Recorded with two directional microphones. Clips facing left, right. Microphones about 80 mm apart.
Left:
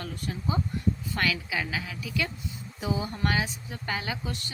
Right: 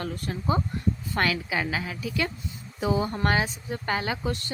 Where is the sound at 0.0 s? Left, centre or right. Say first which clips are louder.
Right 3 dB; right.